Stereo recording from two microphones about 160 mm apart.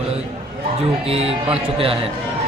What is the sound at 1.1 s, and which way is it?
Speech, 40° right (ahead or behind).